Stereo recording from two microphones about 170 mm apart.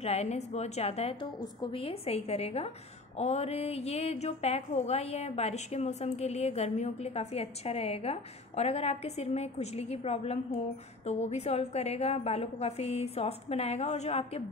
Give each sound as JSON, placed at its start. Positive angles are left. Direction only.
{"t": 0.0, "sound": "a woman's voice", "side_deg": 40}